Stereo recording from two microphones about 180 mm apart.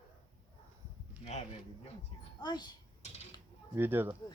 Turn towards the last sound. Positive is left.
turn(degrees=-10)  # may be behind; listen again after turning